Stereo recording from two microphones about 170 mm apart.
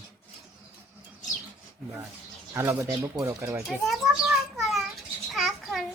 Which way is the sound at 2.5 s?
15° right (ahead or behind).